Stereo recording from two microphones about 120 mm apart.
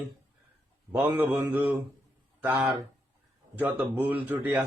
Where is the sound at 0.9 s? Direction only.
15° right (ahead or behind).